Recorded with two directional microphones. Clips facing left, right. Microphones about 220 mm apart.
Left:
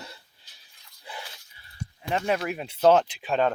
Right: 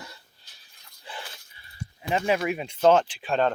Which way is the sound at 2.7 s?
5° left (ahead or behind).